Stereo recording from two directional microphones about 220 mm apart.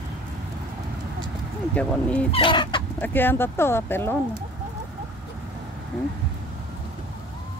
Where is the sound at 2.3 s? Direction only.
20° left (ahead or behind).